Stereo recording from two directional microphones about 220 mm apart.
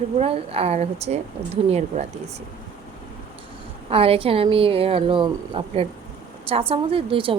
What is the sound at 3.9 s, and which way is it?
A woman's voice, 25° right (ahead or behind).